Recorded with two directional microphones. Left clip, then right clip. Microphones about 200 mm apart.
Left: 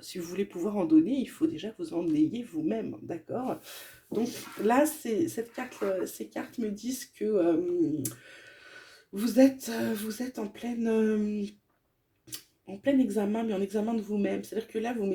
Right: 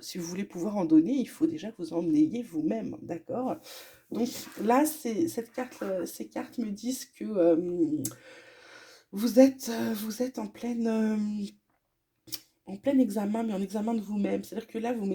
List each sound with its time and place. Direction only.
0.0 s speech: 45° right (ahead or behind)
8.7 s speech: 45° right (ahead or behind)
12.8 s speech: 45° right (ahead or behind)